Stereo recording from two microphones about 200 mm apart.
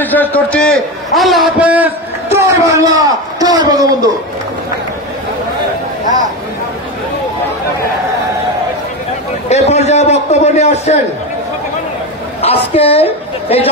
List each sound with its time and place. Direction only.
0.0 s a man's voice: 10° left (ahead or behind); by 4.1 s 20° right (ahead or behind)
9.5 s a sound: 35° left (ahead or behind)
12.4 s a woman's voice: 30° left (ahead or behind)